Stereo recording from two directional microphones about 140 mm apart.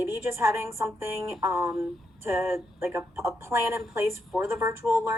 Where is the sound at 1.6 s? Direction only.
5° right (ahead or behind).